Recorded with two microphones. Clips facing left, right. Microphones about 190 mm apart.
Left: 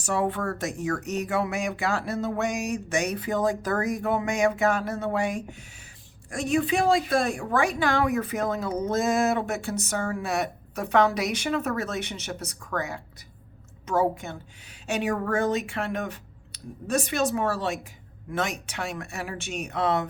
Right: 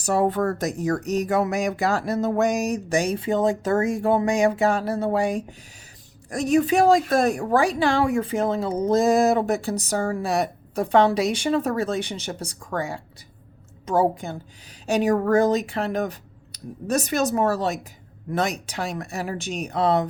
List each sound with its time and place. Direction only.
0.0 s a woman's voice: 40° right (ahead or behind)